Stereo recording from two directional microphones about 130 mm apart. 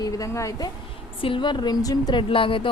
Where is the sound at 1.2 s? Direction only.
40° left (ahead or behind).